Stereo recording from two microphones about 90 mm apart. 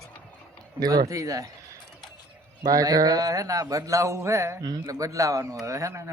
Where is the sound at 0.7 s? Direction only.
40° right (ahead or behind).